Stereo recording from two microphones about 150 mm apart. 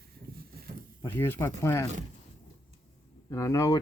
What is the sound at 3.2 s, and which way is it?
Speech, 20° left (ahead or behind).